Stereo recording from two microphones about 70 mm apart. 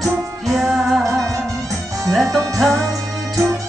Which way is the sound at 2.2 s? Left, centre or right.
Right.